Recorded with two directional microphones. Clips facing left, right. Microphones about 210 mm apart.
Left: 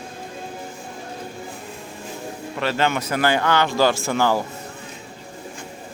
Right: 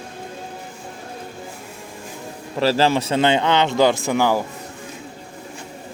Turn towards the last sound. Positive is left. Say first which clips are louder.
# right 2 dB
turn(degrees=-15)  # may be behind; listen again after turning